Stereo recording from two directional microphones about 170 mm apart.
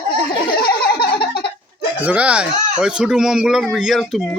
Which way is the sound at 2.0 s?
5° right (ahead or behind).